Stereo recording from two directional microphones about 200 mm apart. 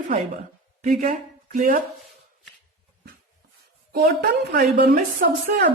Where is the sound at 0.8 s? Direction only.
40° right (ahead or behind).